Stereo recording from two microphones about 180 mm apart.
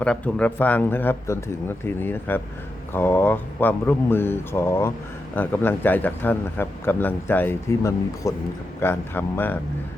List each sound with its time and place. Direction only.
0.0 s speech: 5° left (ahead or behind)